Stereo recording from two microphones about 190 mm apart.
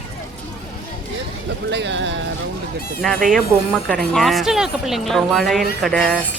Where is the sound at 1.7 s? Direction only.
65° right (ahead or behind).